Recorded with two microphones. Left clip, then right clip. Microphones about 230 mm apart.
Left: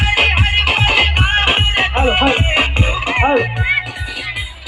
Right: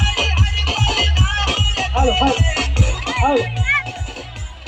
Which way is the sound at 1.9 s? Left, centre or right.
Right.